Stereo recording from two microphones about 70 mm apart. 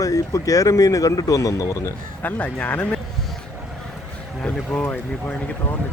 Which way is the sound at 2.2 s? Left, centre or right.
Left.